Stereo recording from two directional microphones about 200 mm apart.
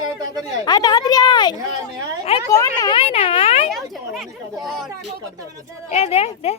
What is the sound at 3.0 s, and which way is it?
Speech, 30° left (ahead or behind).